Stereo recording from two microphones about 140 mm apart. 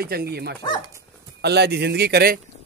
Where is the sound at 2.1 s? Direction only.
90° right.